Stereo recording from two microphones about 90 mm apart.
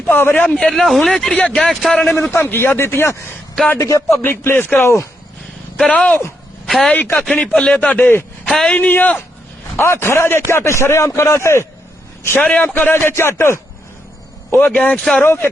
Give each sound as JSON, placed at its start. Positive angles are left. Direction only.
{"t": 0.1, "sound": "a man's voice", "side_deg": 20}
{"t": 0.5, "sound": "speech", "side_deg": 5}
{"t": 2.4, "sound": "a man's voice", "side_deg": 25}
{"t": 4.2, "sound": "a man's voice", "side_deg": 20}
{"t": 5.9, "sound": "speech", "side_deg": 15}
{"t": 6.7, "sound": "a man's voice", "side_deg": 0}
{"t": 6.9, "sound": "speech", "side_deg": 15}
{"t": 8.4, "sound": "a man's voice", "side_deg": 5}
{"t": 8.7, "sound": "speech", "side_deg": 20}
{"t": 9.7, "sound": "a man's voice", "side_deg": 30}
{"t": 14.6, "sound": "speech", "side_deg": 15}
{"t": 14.9, "sound": "speech", "side_deg": 5}
{"t": 15.2, "sound": "a man's voice", "side_deg": 25}